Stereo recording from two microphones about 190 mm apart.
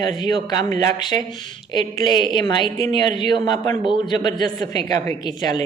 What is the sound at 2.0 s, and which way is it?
A man's voice, 25° left (ahead or behind).